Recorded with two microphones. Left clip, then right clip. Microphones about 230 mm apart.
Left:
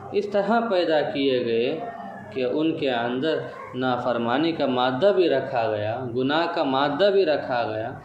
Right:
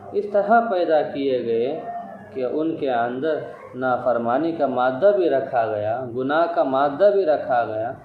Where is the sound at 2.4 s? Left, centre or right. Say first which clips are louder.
Even; left.